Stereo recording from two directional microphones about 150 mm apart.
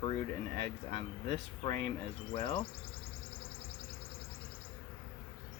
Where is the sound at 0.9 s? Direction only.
35° left (ahead or behind).